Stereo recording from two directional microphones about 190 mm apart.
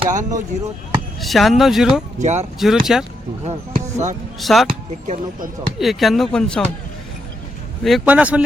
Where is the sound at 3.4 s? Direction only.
35° right (ahead or behind).